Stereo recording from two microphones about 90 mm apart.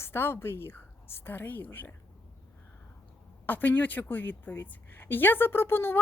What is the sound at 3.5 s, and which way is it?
A woman's voice, 20° left (ahead or behind).